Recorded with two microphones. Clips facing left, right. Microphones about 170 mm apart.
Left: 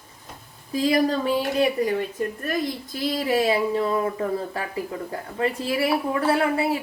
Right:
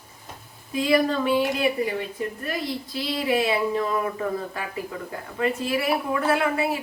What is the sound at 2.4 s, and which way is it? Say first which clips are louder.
A woman's voice: left 3 dB; 45° left (ahead or behind).